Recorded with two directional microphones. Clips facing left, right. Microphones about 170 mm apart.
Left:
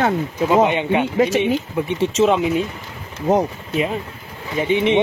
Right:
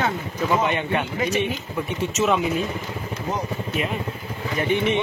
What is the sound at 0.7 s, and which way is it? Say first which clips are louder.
Speech: left 5 dB; 20° left (ahead or behind).